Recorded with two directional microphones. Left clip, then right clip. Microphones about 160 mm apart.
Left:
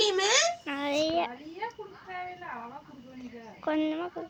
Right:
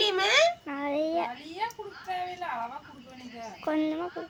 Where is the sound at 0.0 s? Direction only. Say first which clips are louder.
Right 2 dB; centre (ahead or behind).